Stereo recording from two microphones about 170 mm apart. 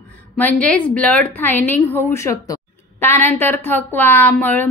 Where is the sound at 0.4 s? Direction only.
10° left (ahead or behind).